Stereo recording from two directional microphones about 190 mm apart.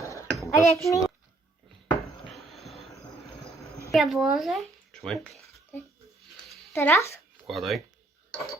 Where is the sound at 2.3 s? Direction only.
Centre (ahead or behind).